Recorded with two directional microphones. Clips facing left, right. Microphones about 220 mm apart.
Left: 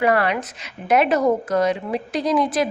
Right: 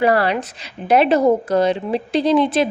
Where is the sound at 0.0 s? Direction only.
30° right (ahead or behind).